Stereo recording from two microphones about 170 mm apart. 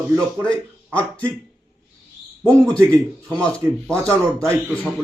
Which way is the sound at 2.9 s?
15° right (ahead or behind).